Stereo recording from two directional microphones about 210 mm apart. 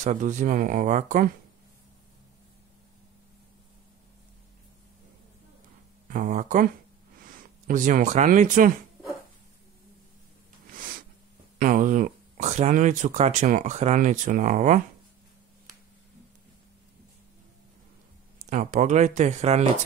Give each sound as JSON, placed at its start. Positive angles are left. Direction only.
{"t": 0.0, "sound": "speech", "side_deg": -35}
{"t": 6.0, "sound": "speech", "side_deg": -40}
{"t": 10.7, "sound": "snort", "side_deg": -40}
{"t": 11.5, "sound": "speech", "side_deg": -40}
{"t": 18.5, "sound": "speech", "side_deg": -35}